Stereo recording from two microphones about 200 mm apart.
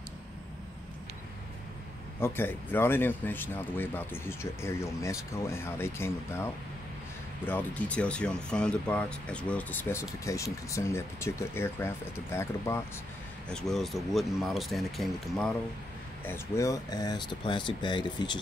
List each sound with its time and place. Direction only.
2.1 s speech: 10° left (ahead or behind)
13.5 s speech: 5° left (ahead or behind)
16.3 s speech: 15° left (ahead or behind)